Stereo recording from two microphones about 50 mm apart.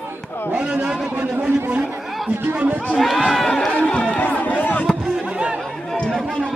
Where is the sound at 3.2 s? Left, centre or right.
Centre.